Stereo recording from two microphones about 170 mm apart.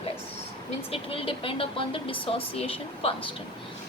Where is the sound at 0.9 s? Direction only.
35° left (ahead or behind).